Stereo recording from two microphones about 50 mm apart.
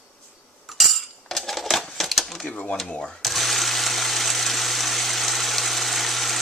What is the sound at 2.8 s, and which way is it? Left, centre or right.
Speech, centre.